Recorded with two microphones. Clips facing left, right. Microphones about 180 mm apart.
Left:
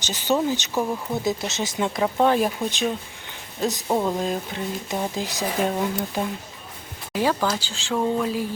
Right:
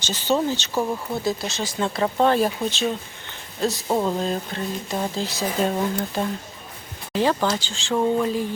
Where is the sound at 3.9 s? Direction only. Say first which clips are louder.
Even; 10° left (ahead or behind).